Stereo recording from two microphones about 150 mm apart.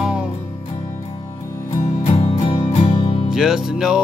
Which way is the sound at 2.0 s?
40° left (ahead or behind).